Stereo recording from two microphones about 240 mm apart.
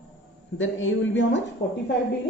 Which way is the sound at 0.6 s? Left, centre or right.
Left.